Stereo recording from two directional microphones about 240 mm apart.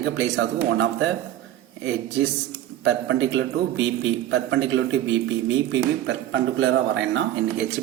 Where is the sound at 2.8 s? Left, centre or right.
Right.